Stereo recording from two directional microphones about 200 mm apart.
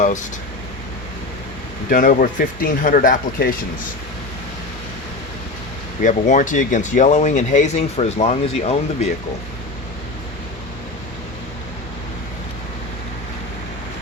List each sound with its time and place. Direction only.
0.0 s a sound: 40° left (ahead or behind)
1.9 s speech: 45° left (ahead or behind)
6.0 s speech: 40° left (ahead or behind)